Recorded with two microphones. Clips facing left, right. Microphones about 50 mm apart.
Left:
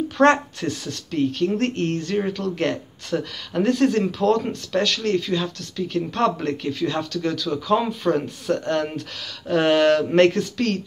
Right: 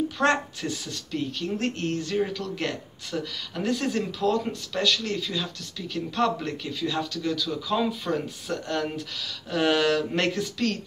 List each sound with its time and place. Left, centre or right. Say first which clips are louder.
0.2 s speech: left 8 dB; left